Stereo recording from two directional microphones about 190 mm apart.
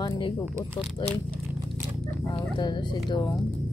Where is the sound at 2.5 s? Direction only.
25° left (ahead or behind).